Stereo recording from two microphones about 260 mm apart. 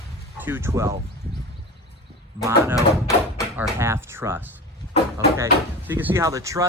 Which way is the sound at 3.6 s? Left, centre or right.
Centre.